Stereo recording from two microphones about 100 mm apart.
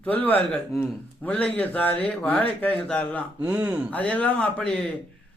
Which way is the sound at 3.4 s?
15° right (ahead or behind).